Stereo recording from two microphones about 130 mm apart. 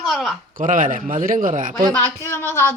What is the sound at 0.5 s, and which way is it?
Speech, 90° right.